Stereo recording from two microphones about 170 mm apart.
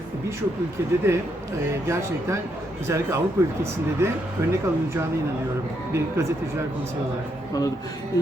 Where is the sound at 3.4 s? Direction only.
15° right (ahead or behind).